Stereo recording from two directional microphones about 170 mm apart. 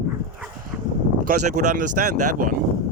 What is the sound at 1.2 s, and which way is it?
Speech, 45° right (ahead or behind).